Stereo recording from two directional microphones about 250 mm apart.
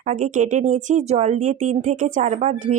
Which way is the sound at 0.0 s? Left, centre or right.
Right.